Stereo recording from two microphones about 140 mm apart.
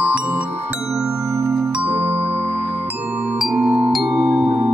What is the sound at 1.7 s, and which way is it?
Music, 10° right (ahead or behind).